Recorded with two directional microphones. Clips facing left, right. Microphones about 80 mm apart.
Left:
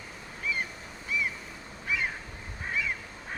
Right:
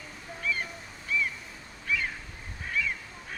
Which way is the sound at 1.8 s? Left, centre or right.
Centre.